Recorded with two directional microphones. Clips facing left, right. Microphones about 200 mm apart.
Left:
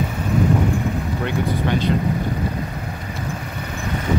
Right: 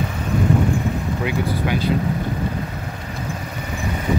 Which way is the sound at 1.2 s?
5° right (ahead or behind).